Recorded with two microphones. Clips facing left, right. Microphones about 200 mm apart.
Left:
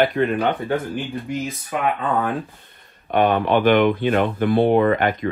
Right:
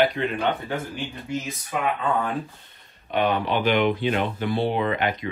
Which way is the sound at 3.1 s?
50° left (ahead or behind).